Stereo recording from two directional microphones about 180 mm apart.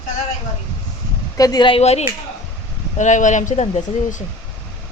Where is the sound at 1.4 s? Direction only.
20° left (ahead or behind); by 4.2 s 40° left (ahead or behind).